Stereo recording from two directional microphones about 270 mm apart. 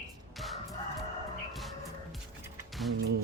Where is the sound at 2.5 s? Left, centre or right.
Centre.